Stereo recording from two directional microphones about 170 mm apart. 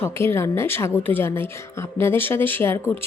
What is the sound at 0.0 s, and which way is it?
Speech, 15° left (ahead or behind).